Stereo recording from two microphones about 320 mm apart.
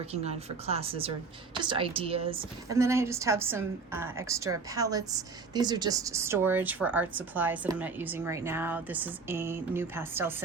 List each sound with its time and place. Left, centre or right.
0.0 s a woman's voice: centre